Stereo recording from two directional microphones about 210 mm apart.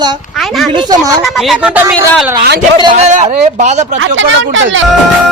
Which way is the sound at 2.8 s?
30° right (ahead or behind).